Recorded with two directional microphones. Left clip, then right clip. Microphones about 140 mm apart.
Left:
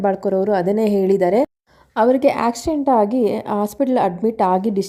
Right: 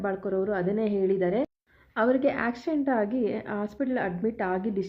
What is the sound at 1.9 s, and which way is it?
A woman's voice, 40° left (ahead or behind).